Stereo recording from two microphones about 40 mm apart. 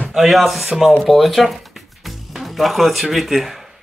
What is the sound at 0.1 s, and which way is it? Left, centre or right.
Speech, centre.